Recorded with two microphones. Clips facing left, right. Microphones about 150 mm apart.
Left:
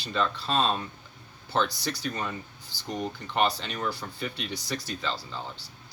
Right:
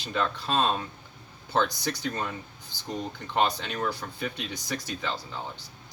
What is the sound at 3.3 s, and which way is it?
Speech, 15° right (ahead or behind).